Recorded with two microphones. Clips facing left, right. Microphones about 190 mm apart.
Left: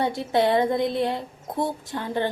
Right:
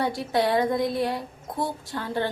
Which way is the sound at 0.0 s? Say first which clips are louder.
Left 2 dB; 20° left (ahead or behind).